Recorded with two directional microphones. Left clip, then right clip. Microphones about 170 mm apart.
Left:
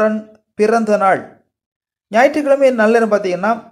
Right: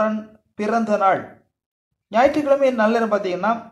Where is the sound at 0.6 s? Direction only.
30° left (ahead or behind).